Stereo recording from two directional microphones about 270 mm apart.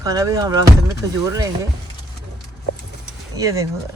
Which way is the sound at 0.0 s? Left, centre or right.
Centre.